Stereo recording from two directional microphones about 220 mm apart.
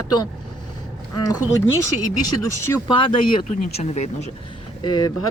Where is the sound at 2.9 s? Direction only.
25° left (ahead or behind).